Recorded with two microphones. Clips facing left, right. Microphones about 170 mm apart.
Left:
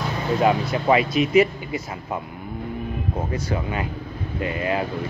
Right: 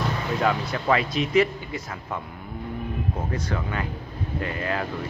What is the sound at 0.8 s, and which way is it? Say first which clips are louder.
Speech: left 4 dB; 10° left (ahead or behind).